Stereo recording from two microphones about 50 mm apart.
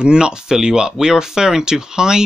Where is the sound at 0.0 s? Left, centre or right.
Centre.